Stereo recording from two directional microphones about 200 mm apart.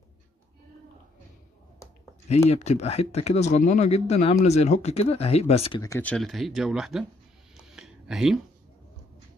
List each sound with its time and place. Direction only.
2.2 s speech: 30° left (ahead or behind)
5.8 s speech: 15° left (ahead or behind)
7.6 s a sound: centre (ahead or behind)